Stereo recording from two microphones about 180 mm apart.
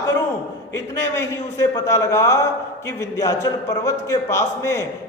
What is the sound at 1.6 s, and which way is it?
A man's voice, 15° left (ahead or behind).